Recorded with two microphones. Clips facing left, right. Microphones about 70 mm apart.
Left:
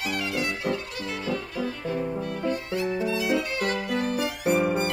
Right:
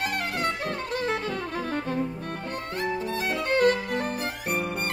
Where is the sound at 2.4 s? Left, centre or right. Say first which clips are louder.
Left 3 dB; right.